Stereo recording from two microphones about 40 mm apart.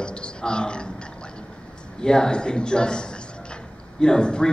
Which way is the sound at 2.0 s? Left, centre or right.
Centre.